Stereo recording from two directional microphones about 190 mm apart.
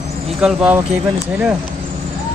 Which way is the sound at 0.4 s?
5° right (ahead or behind).